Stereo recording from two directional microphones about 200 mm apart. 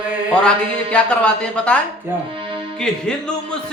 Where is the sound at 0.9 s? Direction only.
5° left (ahead or behind).